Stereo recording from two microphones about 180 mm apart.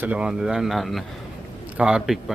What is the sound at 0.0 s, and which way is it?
Speech, 5° right (ahead or behind).